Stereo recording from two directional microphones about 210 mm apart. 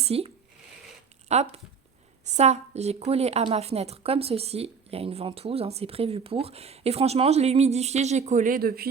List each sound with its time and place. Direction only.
0.0 s speech: 30° right (ahead or behind)
1.3 s a woman's voice: 30° right (ahead or behind); by 8.9 s 45° right (ahead or behind)